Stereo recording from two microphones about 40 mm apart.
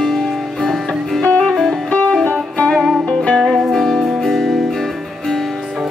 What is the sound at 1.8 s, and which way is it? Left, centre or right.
Music, left.